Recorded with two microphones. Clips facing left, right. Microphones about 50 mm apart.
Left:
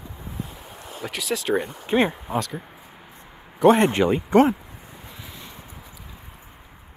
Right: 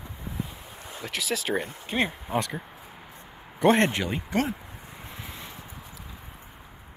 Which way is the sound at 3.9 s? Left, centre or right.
Left.